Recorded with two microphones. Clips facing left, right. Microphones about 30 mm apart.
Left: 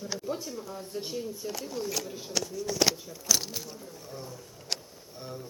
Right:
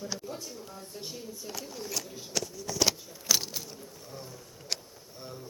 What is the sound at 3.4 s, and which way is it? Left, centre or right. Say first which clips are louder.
Speech: left 1 dB; centre.